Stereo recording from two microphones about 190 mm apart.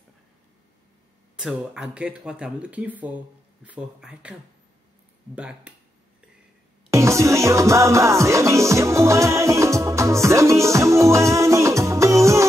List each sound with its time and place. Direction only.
1.3 s speech: 5° right (ahead or behind)
6.9 s music: 15° right (ahead or behind)